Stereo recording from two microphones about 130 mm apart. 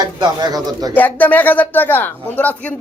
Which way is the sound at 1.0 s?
15° left (ahead or behind).